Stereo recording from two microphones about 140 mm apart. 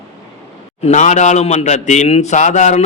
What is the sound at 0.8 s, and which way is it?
A man's voice, 55° left (ahead or behind).